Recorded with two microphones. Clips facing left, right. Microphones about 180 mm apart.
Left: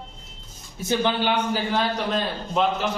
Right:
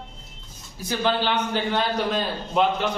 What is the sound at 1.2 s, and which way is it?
A man's voice, 5° left (ahead or behind).